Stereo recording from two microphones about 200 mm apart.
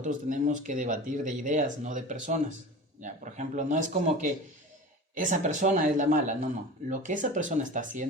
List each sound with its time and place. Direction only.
0.0 s speech: 40° right (ahead or behind)